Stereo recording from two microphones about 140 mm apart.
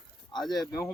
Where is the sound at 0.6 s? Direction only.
25° left (ahead or behind).